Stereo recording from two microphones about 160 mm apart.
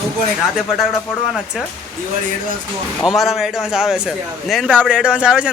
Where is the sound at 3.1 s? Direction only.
Centre (ahead or behind).